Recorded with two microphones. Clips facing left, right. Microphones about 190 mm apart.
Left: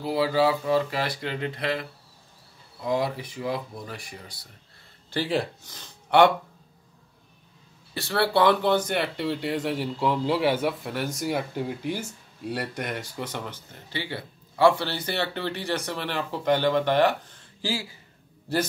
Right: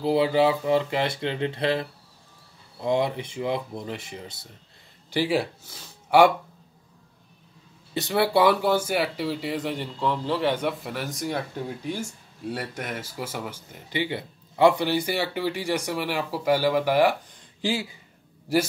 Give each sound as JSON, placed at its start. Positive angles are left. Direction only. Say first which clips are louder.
{"t": 0.0, "sound": "speech", "louder": "right 2 dB", "side_deg": -25}
{"t": 5.1, "sound": "speech", "louder": "right 2 dB", "side_deg": -10}
{"t": 7.9, "sound": "speech", "louder": "right 2 dB", "side_deg": -20}